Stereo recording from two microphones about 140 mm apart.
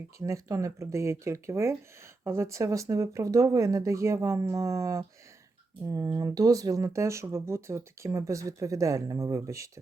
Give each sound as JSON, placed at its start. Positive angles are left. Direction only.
{"t": 0.2, "sound": "speech", "side_deg": -20}